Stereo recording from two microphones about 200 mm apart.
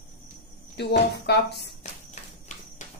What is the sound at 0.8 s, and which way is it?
Speech, 55° left (ahead or behind).